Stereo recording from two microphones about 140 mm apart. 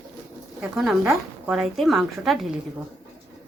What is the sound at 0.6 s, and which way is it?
A woman's voice, 5° right (ahead or behind).